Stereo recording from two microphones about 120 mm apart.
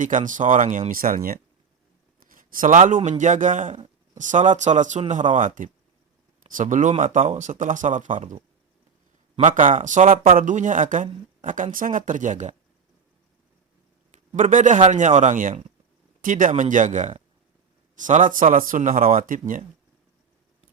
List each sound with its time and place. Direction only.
0.0 s speech: 90° right
2.3 s speech: 90° right
9.3 s speech: 90° right
14.5 s speech: 90° right